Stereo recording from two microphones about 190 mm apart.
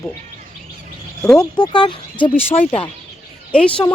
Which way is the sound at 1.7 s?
25° left (ahead or behind).